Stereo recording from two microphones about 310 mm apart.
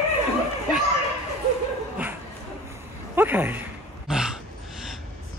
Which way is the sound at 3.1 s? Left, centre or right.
Centre.